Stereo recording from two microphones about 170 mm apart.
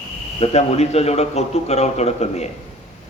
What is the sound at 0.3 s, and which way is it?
A man's voice, 35° left (ahead or behind).